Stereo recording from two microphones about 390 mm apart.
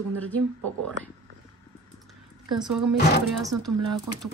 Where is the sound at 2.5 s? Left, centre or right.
Centre.